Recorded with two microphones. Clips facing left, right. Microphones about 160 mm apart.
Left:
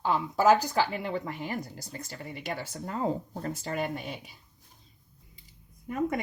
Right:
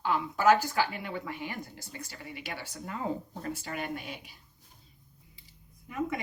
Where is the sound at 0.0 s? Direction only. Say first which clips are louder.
Left 2 dB; 35° left (ahead or behind).